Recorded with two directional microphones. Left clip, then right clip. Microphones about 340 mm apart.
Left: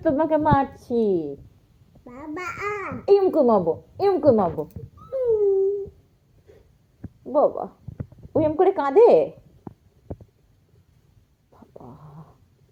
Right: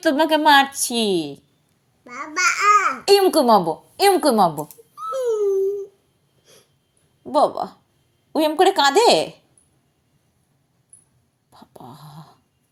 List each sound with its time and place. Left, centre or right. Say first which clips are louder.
0.0 s a woman's voice: right 4 dB; right
1.1 s a woman's voice: right 2 dB; right
2.1 s a child's voice: right 12 dB; centre
3.2 s a woman's voice: right 3 dB; right
5.1 s a sound: even; centre
7.3 s a woman's voice: right 2 dB; right
11.5 s dog: right 3 dB; right